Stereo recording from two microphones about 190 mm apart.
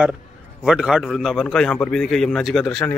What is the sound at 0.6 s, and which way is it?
A man's voice, 5° right (ahead or behind).